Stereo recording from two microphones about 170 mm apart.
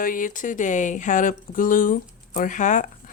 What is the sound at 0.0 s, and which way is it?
Speech, 50° left (ahead or behind).